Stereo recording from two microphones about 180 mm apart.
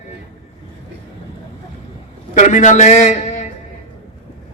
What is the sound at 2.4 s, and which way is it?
A man's voice, 45° left (ahead or behind).